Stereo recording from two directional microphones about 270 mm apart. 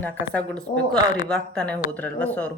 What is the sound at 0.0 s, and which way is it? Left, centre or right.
Speech, centre.